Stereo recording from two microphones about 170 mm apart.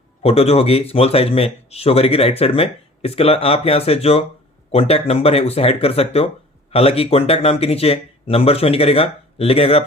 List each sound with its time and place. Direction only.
0.2 s speech: 35° left (ahead or behind)